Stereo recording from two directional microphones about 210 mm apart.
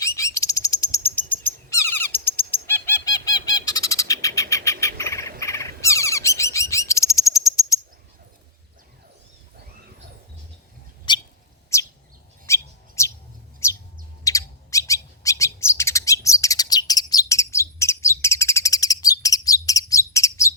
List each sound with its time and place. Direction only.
0.0 s bird: 15° left (ahead or behind)
11.1 s bird: 20° left (ahead or behind)
13.6 s chirp: 10° left (ahead or behind)
14.3 s bird: 15° left (ahead or behind)